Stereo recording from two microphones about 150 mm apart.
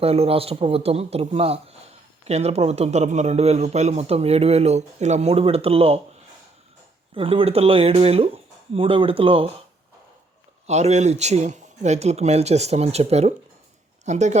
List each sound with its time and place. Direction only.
0.0 s speech: 40° right (ahead or behind)
7.1 s speech: 35° right (ahead or behind)
10.7 s speech: 45° right (ahead or behind)